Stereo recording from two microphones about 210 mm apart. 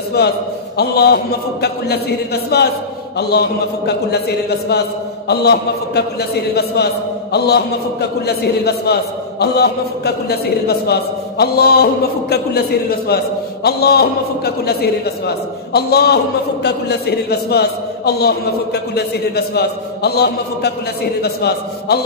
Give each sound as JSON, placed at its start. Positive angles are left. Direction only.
{"t": 0.2, "sound": "a man's voice", "side_deg": 50}